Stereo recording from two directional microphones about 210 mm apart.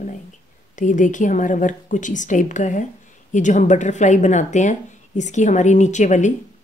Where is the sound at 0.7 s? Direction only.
35° left (ahead or behind).